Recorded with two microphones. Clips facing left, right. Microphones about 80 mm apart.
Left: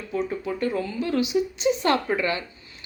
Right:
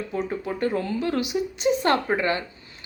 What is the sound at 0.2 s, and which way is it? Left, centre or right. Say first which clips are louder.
Speech: even; right.